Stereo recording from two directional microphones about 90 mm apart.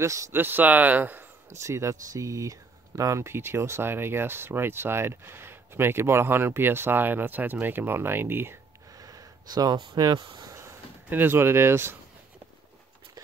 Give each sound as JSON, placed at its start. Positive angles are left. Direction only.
{"t": 0.0, "sound": "speech", "side_deg": -35}
{"t": 0.3, "sound": "speech", "side_deg": -25}
{"t": 1.6, "sound": "speech", "side_deg": -35}
{"t": 8.9, "sound": "speech", "side_deg": -40}
{"t": 10.5, "sound": "a sound", "side_deg": -35}
{"t": 11.1, "sound": "speech", "side_deg": -25}